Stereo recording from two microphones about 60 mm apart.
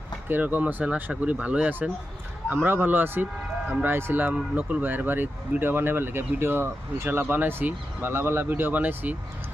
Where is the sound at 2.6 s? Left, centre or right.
Right.